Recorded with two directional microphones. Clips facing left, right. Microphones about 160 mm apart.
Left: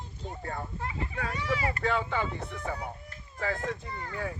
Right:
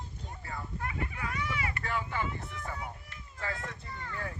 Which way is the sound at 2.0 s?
90° left.